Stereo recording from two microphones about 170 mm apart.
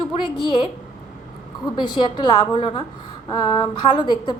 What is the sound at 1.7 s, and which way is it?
A woman's voice, 25° left (ahead or behind).